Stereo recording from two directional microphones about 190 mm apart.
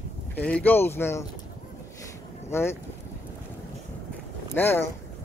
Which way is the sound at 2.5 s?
15° left (ahead or behind).